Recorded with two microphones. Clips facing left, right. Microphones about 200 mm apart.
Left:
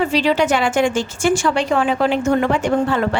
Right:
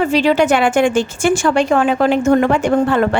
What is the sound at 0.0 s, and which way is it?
A woman's voice, 50° right (ahead or behind).